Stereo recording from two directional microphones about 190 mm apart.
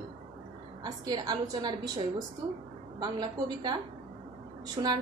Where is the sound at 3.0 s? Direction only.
20° right (ahead or behind).